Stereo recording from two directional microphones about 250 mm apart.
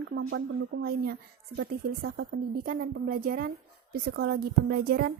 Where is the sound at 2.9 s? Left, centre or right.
Right.